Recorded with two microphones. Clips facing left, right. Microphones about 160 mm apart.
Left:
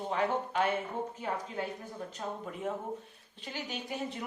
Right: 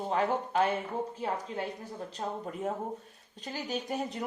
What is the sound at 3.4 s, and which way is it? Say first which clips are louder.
Speech: right 4 dB; 40° right (ahead or behind).